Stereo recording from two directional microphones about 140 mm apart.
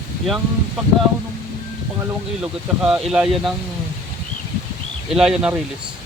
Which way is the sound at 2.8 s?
5° right (ahead or behind).